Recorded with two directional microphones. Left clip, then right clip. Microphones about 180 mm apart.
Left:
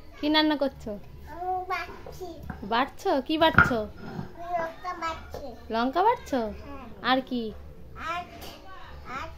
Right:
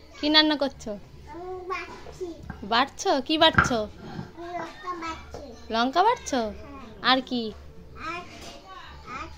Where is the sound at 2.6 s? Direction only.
5° left (ahead or behind).